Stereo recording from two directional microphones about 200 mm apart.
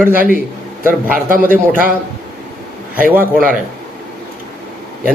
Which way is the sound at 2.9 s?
10° right (ahead or behind).